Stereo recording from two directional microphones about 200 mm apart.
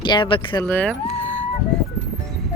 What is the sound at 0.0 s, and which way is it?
Speech, 25° left (ahead or behind).